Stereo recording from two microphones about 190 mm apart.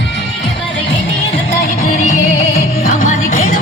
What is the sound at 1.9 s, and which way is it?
Music, 40° left (ahead or behind).